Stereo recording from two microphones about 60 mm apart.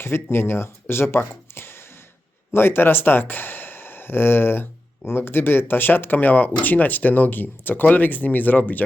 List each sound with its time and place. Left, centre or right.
0.0 s speech: left
1.2 s a sound: left
2.5 s speech: left